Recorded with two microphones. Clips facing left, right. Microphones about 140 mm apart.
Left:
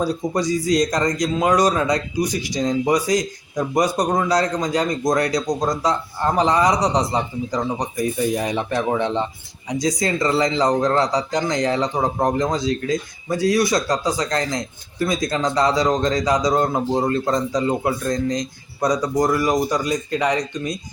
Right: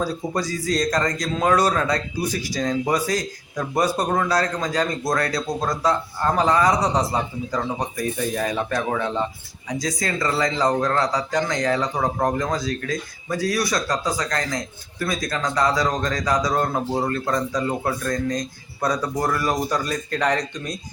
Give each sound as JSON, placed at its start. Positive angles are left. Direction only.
{"t": 0.0, "sound": "a man's voice", "side_deg": 20}